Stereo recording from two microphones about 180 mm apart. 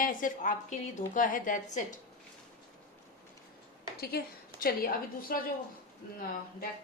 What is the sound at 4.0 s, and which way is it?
A woman's voice, 60° left (ahead or behind).